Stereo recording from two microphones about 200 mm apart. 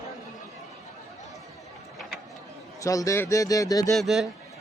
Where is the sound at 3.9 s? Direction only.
Centre (ahead or behind).